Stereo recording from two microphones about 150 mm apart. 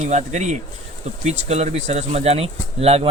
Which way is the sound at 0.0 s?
50° right (ahead or behind).